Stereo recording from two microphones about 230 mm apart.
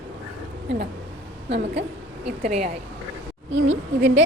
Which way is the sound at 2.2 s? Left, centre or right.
Right.